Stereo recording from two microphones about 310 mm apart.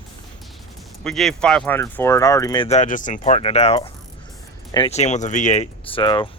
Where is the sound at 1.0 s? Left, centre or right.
Centre.